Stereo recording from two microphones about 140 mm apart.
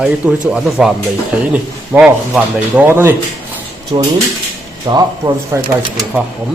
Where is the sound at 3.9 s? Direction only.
40° right (ahead or behind).